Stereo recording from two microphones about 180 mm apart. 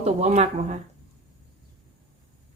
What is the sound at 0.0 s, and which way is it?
Speech, 35° right (ahead or behind).